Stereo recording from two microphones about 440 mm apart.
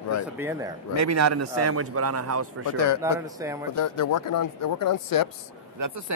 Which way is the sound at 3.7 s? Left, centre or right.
Left.